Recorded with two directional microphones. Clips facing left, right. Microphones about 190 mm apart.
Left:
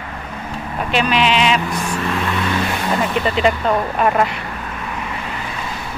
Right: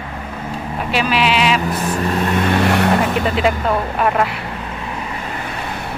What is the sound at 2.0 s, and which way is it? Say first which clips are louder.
Vehicle: right 5 dB; 40° right (ahead or behind).